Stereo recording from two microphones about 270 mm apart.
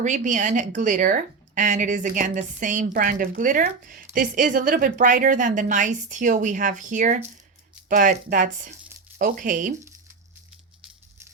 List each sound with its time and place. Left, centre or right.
0.0 s speech: right